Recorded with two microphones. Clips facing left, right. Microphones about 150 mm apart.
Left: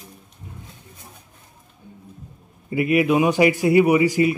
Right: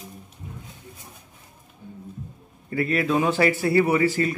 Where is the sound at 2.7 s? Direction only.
15° left (ahead or behind).